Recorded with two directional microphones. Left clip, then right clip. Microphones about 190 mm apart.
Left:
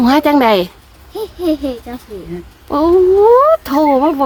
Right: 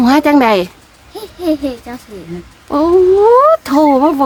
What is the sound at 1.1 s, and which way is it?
Speech, 10° right (ahead or behind).